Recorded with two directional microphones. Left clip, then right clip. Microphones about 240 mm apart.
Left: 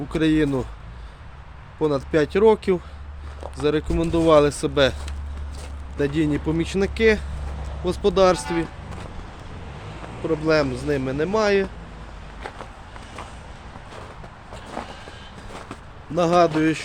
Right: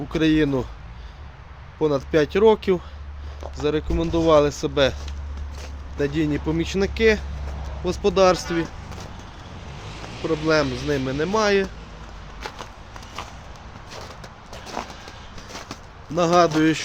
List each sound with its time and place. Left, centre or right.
0.1 s speech: centre
1.8 s speech: centre
3.6 s speech: centre
10.2 s speech: centre
14.8 s vehicle: centre
16.1 s speech: centre